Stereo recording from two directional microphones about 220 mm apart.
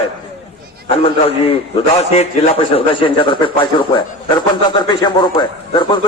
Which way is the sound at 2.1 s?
25° left (ahead or behind).